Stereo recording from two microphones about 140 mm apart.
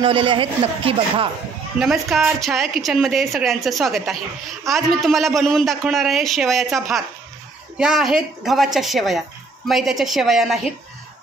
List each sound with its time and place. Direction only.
0.0 s a man's voice: 40° right (ahead or behind)
1.8 s a woman's voice: centre (ahead or behind)